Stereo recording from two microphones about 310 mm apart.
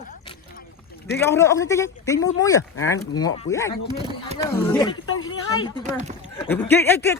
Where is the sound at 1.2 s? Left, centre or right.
Centre.